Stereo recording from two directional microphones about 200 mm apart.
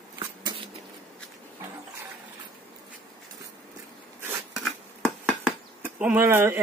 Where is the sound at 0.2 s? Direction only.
25° right (ahead or behind).